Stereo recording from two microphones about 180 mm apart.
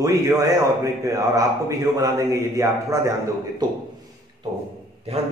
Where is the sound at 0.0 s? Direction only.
15° right (ahead or behind).